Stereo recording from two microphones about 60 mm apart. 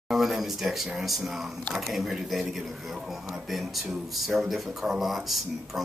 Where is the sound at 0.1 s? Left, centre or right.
Centre.